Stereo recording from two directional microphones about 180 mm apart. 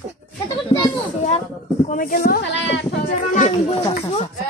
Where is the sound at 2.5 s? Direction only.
80° left.